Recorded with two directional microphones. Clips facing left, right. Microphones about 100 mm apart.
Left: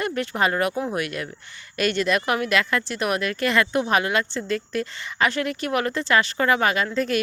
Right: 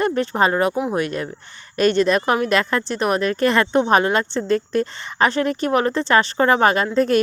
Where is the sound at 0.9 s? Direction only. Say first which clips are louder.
Right 5 dB; 30° right (ahead or behind).